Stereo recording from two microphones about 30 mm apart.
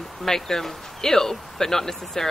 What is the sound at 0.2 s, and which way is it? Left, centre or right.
Speech, centre.